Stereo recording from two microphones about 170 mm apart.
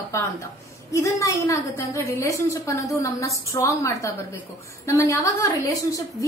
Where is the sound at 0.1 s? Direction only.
15° left (ahead or behind).